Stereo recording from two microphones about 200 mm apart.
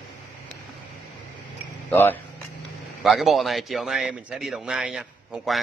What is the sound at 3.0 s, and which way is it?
A man's voice, centre (ahead or behind).